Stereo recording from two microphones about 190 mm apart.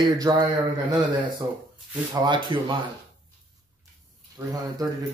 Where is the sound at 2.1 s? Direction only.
25° right (ahead or behind).